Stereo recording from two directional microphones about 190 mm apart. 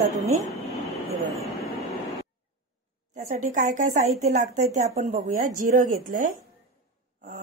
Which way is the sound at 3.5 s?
40° right (ahead or behind).